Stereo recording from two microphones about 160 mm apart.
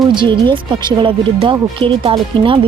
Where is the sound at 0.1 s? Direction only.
30° right (ahead or behind).